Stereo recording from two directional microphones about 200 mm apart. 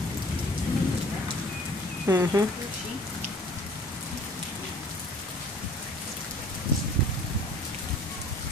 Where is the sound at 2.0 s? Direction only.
15° right (ahead or behind).